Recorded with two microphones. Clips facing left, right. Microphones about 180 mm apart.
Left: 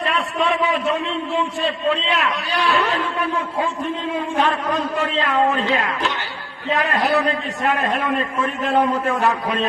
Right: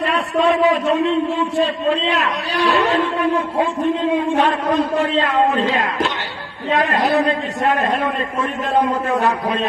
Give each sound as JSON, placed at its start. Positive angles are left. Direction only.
{"t": 0.1, "sound": "a sound", "side_deg": -35}
{"t": 1.5, "sound": "a man's voice", "side_deg": -35}
{"t": 4.4, "sound": "a man's voice", "side_deg": -35}